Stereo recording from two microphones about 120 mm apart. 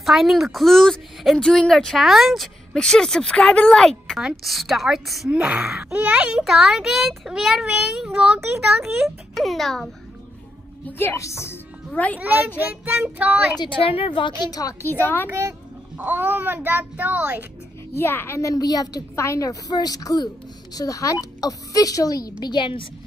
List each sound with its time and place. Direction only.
0.0 s speech: centre (ahead or behind)
10.9 s a woman's voice: 20° left (ahead or behind)
11.9 s a woman's voice: 10° left (ahead or behind)
12.2 s a child's voice: 15° right (ahead or behind)
13.6 s a woman's voice: 50° left (ahead or behind)
14.8 s a woman's voice: 15° left (ahead or behind)
15.2 s a child's voice: 20° right (ahead or behind)
17.9 s a woman's voice: 20° left (ahead or behind); by 22.8 s 45° left (ahead or behind)